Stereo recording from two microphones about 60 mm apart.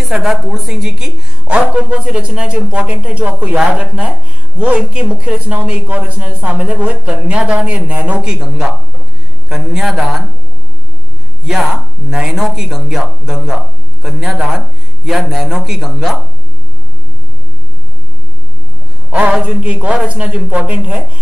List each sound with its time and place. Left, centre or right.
0.0 s a man's voice: centre
1.5 s a woman's voice: right
8.2 s a man's voice: centre
11.4 s a man's voice: centre
19.4 s a woman's voice: right